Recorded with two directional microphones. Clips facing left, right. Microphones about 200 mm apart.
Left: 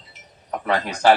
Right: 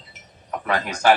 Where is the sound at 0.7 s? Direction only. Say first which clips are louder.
Left 2 dB; 30° left (ahead or behind).